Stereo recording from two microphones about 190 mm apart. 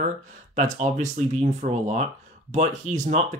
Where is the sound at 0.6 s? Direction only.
40° right (ahead or behind).